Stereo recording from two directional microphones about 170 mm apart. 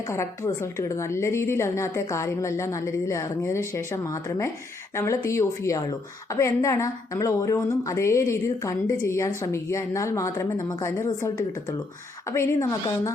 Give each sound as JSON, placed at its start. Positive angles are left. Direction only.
{"t": 0.1, "sound": "a woman's voice", "side_deg": 15}